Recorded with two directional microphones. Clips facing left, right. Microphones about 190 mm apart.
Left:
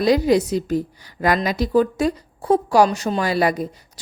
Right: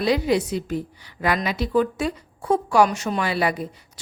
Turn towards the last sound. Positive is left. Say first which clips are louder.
# left 4 dB
turn(degrees=40)  # may be behind; listen again after turning